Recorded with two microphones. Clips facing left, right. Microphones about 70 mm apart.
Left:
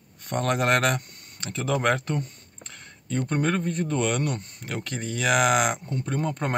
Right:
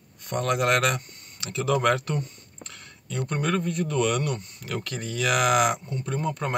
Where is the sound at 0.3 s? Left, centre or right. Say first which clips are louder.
Even; left.